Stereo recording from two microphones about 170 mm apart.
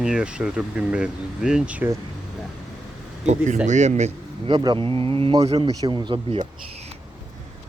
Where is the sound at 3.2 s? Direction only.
40° right (ahead or behind).